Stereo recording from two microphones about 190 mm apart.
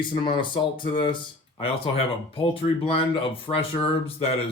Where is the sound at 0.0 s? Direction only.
25° left (ahead or behind).